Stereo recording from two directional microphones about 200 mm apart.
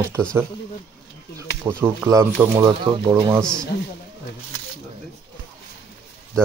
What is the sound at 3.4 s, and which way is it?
Speech, 5° left (ahead or behind).